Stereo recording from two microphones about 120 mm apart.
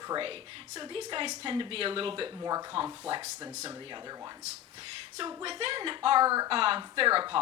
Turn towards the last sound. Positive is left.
turn(degrees=-45)  # may be behind; listen again after turning